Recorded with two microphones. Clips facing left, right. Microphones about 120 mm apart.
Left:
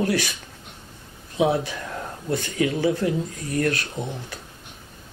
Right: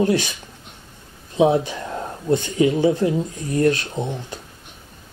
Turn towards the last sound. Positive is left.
turn(degrees=-20)  # may be behind; listen again after turning